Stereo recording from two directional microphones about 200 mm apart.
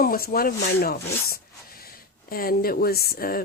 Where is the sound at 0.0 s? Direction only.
45° left (ahead or behind).